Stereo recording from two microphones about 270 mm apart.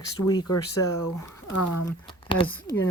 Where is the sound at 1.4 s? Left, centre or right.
Left.